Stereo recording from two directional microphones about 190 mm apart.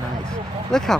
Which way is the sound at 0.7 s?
Centre (ahead or behind).